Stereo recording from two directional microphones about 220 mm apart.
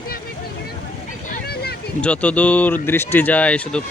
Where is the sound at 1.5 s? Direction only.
45° left (ahead or behind).